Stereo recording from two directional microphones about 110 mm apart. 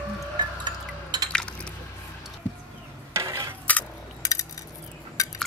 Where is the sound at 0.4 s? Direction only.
40° right (ahead or behind).